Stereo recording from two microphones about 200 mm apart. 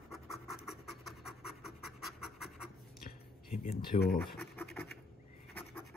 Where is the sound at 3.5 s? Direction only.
35° left (ahead or behind).